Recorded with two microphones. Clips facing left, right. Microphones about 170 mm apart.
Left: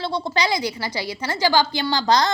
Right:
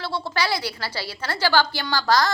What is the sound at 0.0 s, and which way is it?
A woman's voice, 15° left (ahead or behind).